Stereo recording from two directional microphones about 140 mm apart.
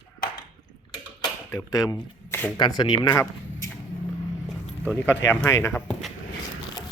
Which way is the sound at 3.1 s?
20° left (ahead or behind).